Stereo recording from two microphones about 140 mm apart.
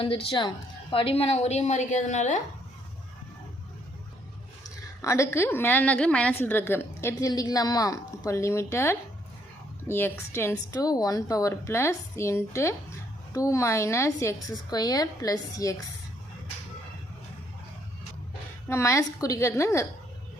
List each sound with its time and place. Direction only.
0.0 s a woman's voice: 40° left (ahead or behind); by 2.4 s 60° left (ahead or behind)
4.6 s a woman's voice: 20° left (ahead or behind)
18.7 s speech: 20° left (ahead or behind)